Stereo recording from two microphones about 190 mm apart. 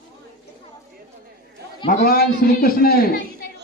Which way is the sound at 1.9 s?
50° left (ahead or behind).